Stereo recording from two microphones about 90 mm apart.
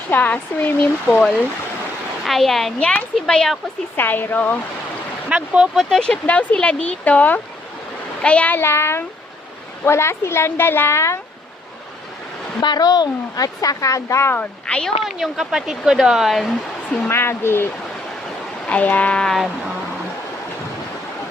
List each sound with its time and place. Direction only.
0.1 s a woman's voice: 20° left (ahead or behind)
2.2 s speech: centre (ahead or behind)
2.7 s speech: 10° left (ahead or behind)
3.9 s a woman's voice: 20° left (ahead or behind)
5.3 s speech: 10° right (ahead or behind)
5.7 s a woman's voice: 5° left (ahead or behind); by 11.2 s 30° left (ahead or behind)
12.6 s speech: 50° left (ahead or behind); by 14.3 s 35° left (ahead or behind)
14.3 s speech: 10° left (ahead or behind)
15.2 s speech: 5° right (ahead or behind)
17.1 s a woman's voice: 25° left (ahead or behind)
18.7 s speech: 15° left (ahead or behind)